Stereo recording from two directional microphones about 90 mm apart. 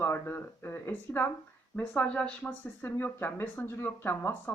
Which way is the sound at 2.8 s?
25° left (ahead or behind).